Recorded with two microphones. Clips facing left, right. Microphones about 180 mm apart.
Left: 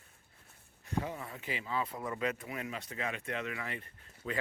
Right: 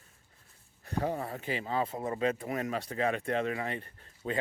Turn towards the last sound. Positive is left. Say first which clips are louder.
# right 4 dB
turn(degrees=-30)  # may be behind; listen again after turning